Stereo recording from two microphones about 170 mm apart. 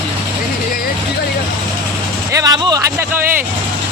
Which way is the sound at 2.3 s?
25° right (ahead or behind).